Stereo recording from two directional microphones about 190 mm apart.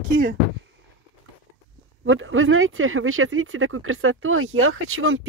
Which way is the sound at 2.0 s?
90° right.